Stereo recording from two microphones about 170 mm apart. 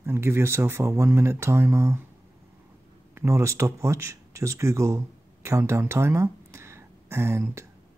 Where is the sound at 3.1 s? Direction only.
15° right (ahead or behind).